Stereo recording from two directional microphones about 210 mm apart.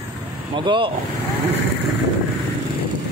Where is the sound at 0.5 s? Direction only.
25° right (ahead or behind).